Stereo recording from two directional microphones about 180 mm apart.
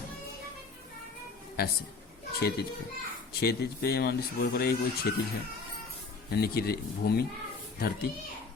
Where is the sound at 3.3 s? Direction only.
60° left (ahead or behind).